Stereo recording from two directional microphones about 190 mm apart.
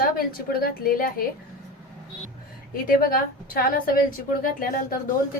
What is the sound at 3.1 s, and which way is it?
A woman's voice, 50° left (ahead or behind).